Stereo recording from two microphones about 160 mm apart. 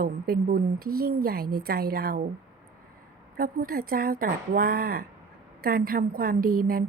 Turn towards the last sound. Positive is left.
turn(degrees=-65)  # may be behind; listen again after turning